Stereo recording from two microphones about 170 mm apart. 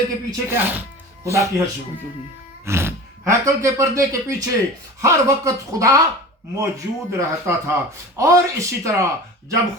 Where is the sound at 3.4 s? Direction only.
20° right (ahead or behind).